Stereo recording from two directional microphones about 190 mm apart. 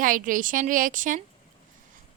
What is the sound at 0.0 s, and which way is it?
A woman's voice, 45° right (ahead or behind).